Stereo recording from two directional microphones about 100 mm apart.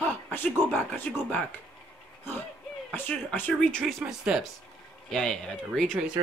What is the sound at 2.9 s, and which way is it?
Speech, 20° left (ahead or behind).